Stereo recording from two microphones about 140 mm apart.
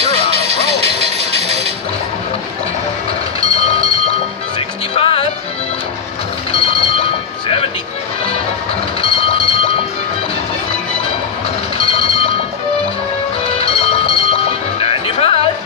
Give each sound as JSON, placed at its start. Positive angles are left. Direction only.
{"t": 0.0, "sound": "music", "side_deg": -50}
{"t": 3.3, "sound": "train", "side_deg": 45}
{"t": 4.6, "sound": "music", "side_deg": 45}
{"t": 6.5, "sound": "train", "side_deg": 45}
{"t": 7.4, "sound": "music", "side_deg": 45}
{"t": 9.0, "sound": "train", "side_deg": 40}
{"t": 11.8, "sound": "a sound", "side_deg": 45}
{"t": 13.4, "sound": "music", "side_deg": 45}